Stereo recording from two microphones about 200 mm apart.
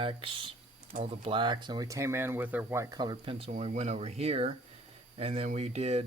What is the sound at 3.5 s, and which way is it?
Speech, 35° right (ahead or behind).